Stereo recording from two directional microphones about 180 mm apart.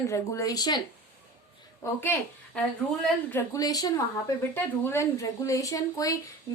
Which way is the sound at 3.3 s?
15° left (ahead or behind).